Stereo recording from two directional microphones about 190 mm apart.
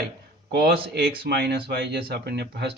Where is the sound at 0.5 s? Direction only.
50° right (ahead or behind).